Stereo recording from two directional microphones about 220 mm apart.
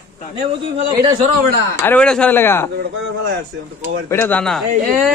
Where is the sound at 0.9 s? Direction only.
20° right (ahead or behind).